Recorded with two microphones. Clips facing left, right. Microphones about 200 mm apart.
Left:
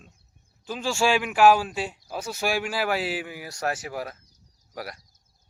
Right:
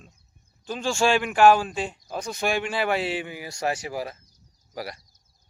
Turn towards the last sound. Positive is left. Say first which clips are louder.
# right 2 dB
turn(degrees=0)  # may be behind; listen again after turning